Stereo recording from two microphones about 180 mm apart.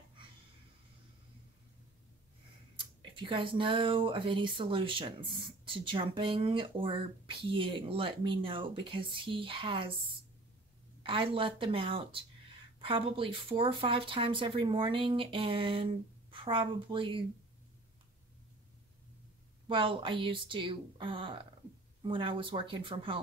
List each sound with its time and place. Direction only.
2.7 s speech: 30° right (ahead or behind)
11.0 s speech: 30° right (ahead or behind)
19.7 s speech: 30° right (ahead or behind)